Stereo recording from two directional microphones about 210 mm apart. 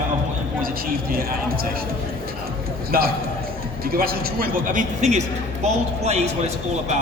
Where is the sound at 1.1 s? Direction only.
45° right (ahead or behind).